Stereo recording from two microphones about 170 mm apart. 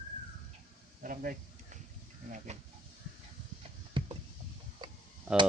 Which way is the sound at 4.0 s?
30° right (ahead or behind).